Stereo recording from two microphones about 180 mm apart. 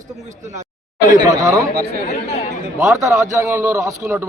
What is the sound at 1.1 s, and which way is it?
Speech, 20° right (ahead or behind).